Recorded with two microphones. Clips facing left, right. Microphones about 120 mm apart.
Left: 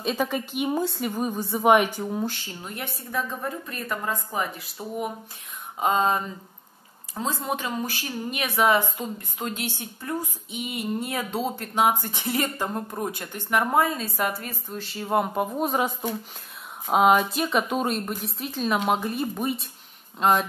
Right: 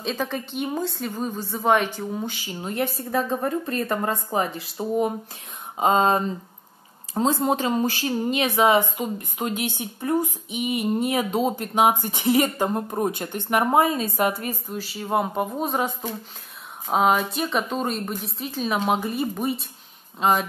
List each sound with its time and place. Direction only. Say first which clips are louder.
0.0 s a woman's voice: left 1 dB; 10° left (ahead or behind)
2.1 s speech: left 1 dB; centre (ahead or behind)
2.6 s a woman's voice: right 11 dB; 30° right (ahead or behind)
4.7 s a woman's voice: right 8 dB; 30° right (ahead or behind); by 20.4 s centre (ahead or behind)